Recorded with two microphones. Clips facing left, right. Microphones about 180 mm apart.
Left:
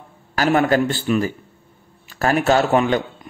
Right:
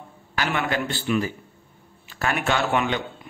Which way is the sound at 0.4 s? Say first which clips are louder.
Left 9 dB; 40° left (ahead or behind).